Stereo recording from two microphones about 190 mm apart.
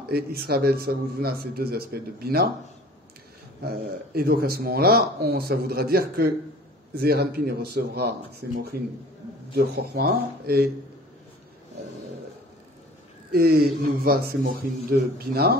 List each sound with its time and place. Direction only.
0.1 s speech: 55° right (ahead or behind)
3.6 s speech: 50° right (ahead or behind)
9.5 s speech: 55° right (ahead or behind)
13.3 s speech: 55° right (ahead or behind)